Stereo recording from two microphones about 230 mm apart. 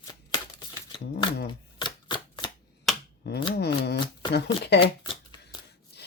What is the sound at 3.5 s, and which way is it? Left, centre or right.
Shuffling cards, left.